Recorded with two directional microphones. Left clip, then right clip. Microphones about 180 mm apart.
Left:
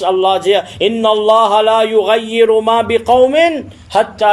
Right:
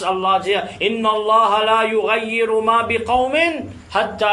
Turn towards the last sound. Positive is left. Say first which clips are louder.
# left 6 dB
turn(degrees=40)  # may be behind; listen again after turning